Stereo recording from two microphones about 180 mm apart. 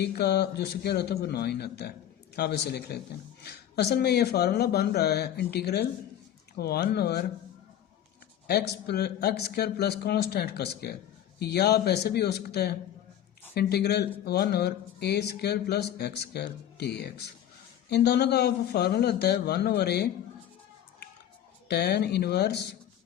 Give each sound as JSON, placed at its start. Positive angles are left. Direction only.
{"t": 0.0, "sound": "speech", "side_deg": 65}
{"t": 8.4, "sound": "speech", "side_deg": 60}
{"t": 21.7, "sound": "speech", "side_deg": 65}